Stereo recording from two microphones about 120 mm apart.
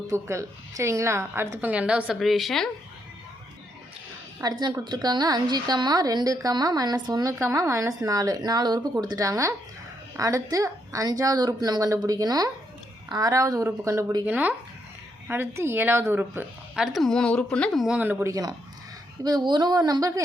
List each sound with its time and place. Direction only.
0.1 s a woman's voice: 25° right (ahead or behind); by 2.6 s centre (ahead or behind)
4.4 s a woman's voice: 30° right (ahead or behind)
14.3 s a woman's voice: 10° right (ahead or behind)
16.7 s speech: 5° right (ahead or behind)
17.9 s a woman's voice: 15° right (ahead or behind)
18.3 s a woman's voice: 30° right (ahead or behind)